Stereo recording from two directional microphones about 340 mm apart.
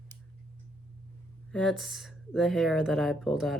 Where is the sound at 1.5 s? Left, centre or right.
Centre.